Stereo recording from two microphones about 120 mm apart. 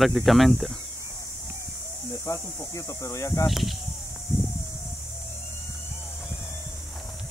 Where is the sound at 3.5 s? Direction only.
Centre (ahead or behind).